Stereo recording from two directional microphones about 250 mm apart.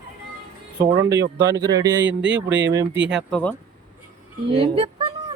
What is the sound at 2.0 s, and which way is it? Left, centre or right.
Speech, right.